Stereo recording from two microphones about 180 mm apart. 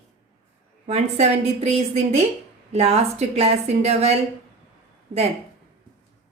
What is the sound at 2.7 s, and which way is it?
A woman's voice, 35° right (ahead or behind).